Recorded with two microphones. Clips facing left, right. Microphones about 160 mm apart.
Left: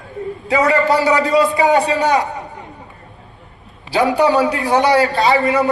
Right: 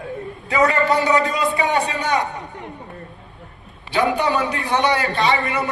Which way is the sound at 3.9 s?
35° left (ahead or behind).